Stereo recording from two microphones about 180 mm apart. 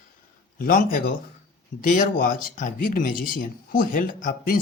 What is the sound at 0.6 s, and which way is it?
Speech, 50° left (ahead or behind).